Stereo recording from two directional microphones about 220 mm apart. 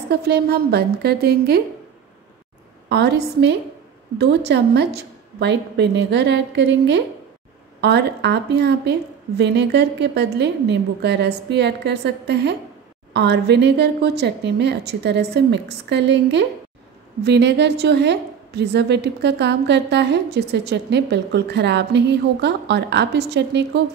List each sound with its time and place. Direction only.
0.1 s a woman's voice: 45° right (ahead or behind)
2.9 s a woman's voice: 50° right (ahead or behind)